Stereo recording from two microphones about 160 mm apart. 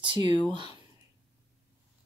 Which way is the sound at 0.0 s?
30° right (ahead or behind).